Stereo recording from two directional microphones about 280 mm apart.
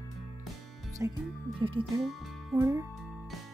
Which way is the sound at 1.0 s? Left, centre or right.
Centre.